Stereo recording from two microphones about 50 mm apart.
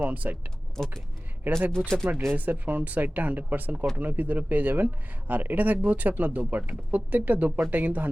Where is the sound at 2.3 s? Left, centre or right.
Right.